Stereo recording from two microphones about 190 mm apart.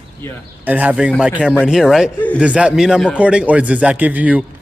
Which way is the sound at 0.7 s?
10° right (ahead or behind).